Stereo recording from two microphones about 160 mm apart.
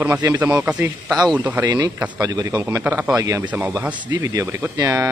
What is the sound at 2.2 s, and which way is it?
Speech, 25° right (ahead or behind).